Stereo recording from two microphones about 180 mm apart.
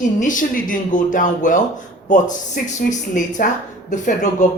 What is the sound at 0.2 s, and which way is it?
Speech, 45° left (ahead or behind).